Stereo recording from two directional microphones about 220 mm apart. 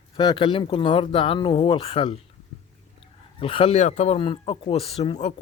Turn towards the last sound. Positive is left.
turn(degrees=30)  # may be behind; listen again after turning